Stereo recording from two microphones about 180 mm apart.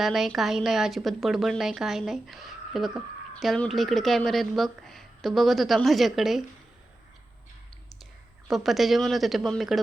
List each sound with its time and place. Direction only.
0.0 s speech: centre (ahead or behind)
8.4 s speech: centre (ahead or behind)